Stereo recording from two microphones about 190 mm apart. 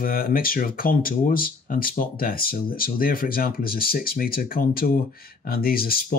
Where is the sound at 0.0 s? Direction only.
50° left (ahead or behind).